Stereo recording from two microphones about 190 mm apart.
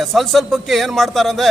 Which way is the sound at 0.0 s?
Centre (ahead or behind).